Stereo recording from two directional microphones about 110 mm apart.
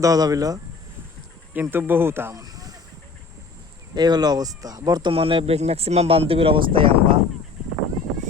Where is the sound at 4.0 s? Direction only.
40° right (ahead or behind).